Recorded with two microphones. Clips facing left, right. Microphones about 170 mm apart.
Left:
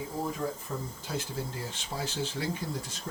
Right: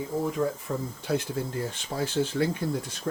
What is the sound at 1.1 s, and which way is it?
Speech, 65° right (ahead or behind).